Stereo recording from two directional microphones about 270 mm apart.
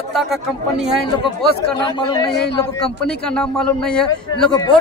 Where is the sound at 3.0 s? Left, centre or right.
Centre.